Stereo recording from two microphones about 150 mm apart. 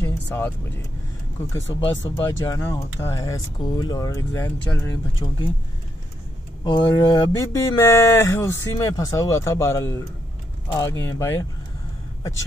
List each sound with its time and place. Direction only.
0.0 s vehicle: 15° left (ahead or behind)
1.5 s speech: 20° left (ahead or behind)
5.2 s speech: 30° left (ahead or behind)
6.6 s speech: 25° left (ahead or behind)